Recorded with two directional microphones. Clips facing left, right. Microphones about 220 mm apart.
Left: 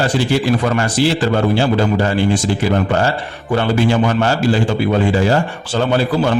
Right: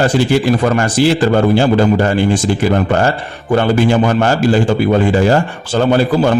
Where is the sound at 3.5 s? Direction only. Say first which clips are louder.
Right 3 dB; 45° right (ahead or behind).